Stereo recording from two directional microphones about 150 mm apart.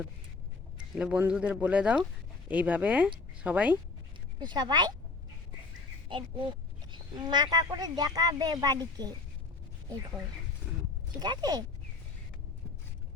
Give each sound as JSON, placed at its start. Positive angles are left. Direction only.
{"t": 0.9, "sound": "speech", "side_deg": -5}
{"t": 4.4, "sound": "a woman's voice", "side_deg": -30}
{"t": 6.1, "sound": "a woman's voice", "side_deg": -35}
{"t": 11.2, "sound": "a woman's voice", "side_deg": -25}